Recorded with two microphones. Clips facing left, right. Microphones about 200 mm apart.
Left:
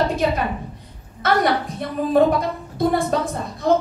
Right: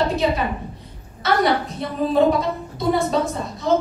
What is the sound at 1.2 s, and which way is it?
A woman's voice, 50° left (ahead or behind).